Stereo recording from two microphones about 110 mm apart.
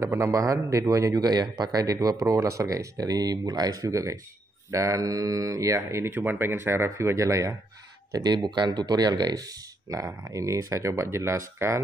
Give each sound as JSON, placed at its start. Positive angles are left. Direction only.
{"t": 0.0, "sound": "speech", "side_deg": -25}